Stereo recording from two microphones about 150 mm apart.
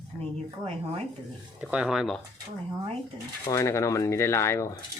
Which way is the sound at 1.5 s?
5° right (ahead or behind).